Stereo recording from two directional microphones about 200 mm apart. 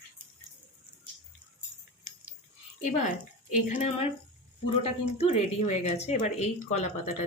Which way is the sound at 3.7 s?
35° left (ahead or behind).